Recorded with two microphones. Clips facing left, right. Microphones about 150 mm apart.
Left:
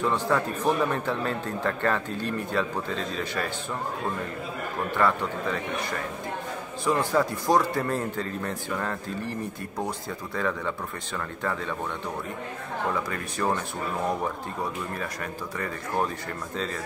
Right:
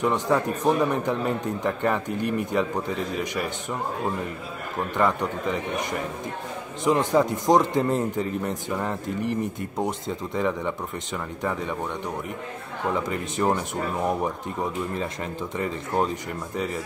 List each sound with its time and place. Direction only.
0.0 s speech: 15° right (ahead or behind)
4.9 s speech: 15° right (ahead or behind)
12.9 s speech: 20° right (ahead or behind)
15.5 s speech: 20° right (ahead or behind)